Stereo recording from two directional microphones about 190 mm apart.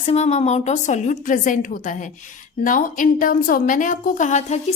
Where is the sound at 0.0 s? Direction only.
35° left (ahead or behind).